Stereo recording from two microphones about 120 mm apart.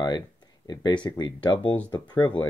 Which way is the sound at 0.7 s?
35° left (ahead or behind).